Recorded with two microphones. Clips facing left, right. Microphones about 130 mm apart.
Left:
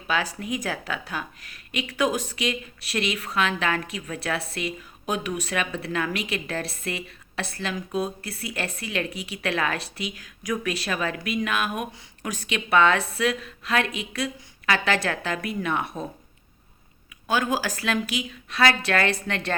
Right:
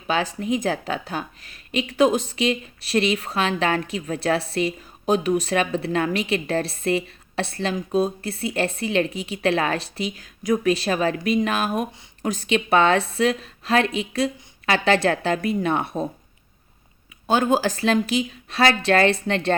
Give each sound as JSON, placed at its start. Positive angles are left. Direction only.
{"t": 0.1, "sound": "a woman's voice", "side_deg": -25}
{"t": 17.2, "sound": "a woman's voice", "side_deg": -30}